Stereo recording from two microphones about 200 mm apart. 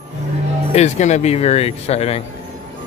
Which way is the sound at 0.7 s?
35° left (ahead or behind).